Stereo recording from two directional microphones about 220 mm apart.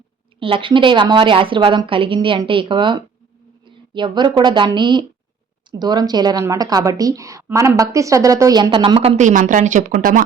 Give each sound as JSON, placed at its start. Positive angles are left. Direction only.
{"t": 0.3, "sound": "a woman's voice", "side_deg": -25}